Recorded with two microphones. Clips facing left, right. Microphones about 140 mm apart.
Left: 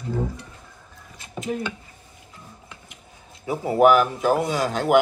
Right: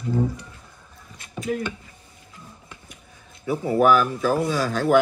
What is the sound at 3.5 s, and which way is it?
Speech, 20° left (ahead or behind).